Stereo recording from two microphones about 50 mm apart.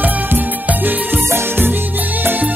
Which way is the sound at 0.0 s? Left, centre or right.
Right.